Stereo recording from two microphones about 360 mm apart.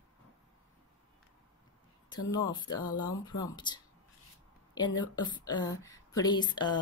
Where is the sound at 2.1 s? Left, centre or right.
Centre.